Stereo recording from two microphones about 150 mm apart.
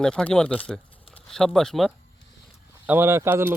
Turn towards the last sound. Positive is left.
turn(degrees=-15)  # may be behind; listen again after turning